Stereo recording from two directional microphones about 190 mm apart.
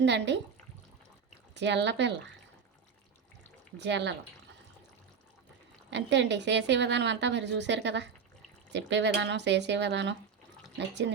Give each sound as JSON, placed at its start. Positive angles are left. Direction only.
{"t": 0.0, "sound": "a woman's voice", "side_deg": -65}
{"t": 1.5, "sound": "a woman's voice", "side_deg": -65}
{"t": 3.8, "sound": "a woman's voice", "side_deg": -65}
{"t": 5.9, "sound": "a woman's voice", "side_deg": -65}